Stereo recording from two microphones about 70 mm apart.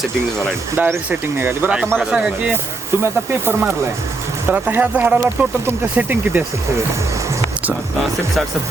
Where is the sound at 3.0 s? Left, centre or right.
Right.